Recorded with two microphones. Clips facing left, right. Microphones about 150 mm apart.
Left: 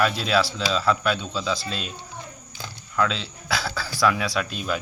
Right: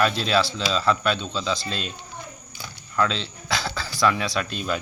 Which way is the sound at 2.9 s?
5° left (ahead or behind).